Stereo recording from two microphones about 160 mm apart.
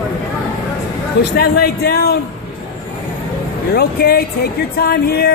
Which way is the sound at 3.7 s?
75° left (ahead or behind).